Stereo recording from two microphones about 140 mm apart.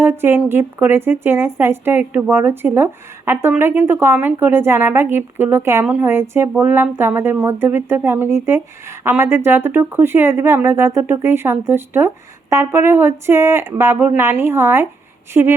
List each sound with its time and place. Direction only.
0.0 s speech: 15° right (ahead or behind)